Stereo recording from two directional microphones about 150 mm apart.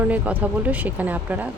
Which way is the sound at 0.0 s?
10° right (ahead or behind).